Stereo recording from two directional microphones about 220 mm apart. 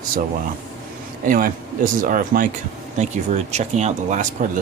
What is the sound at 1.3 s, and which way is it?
Speech, 40° right (ahead or behind).